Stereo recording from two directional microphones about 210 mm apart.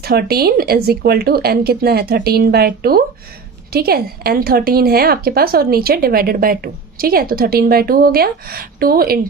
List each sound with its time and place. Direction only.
0.0 s a woman's voice: 50° right (ahead or behind)